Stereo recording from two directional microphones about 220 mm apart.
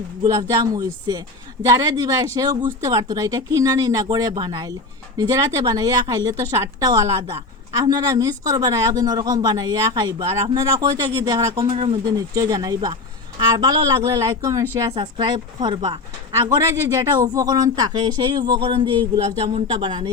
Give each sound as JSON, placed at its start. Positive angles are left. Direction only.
{"t": 0.2, "sound": "a woman's voice", "side_deg": -15}